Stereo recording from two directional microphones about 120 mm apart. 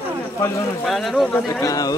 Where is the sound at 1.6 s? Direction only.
30° left (ahead or behind).